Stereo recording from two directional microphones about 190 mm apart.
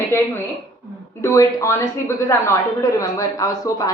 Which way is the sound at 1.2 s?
15° left (ahead or behind).